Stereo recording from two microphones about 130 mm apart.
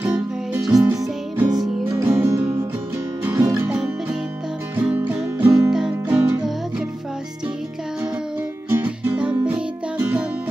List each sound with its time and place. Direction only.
0.5 s music: 5° right (ahead or behind)
0.8 s music: 15° right (ahead or behind)
3.4 s music: 10° right (ahead or behind)
8.6 s music: 15° right (ahead or behind)